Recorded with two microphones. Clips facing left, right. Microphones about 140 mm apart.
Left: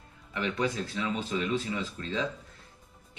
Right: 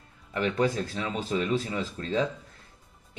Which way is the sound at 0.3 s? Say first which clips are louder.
Right 4 dB; 40° right (ahead or behind).